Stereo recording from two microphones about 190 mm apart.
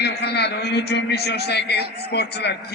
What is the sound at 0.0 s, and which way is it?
A man's voice, 60° left (ahead or behind).